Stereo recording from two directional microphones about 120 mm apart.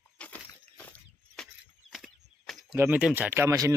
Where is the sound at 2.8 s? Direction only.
15° right (ahead or behind).